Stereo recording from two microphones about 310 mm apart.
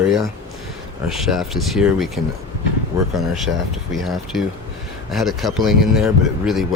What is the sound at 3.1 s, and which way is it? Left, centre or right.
Speech, centre.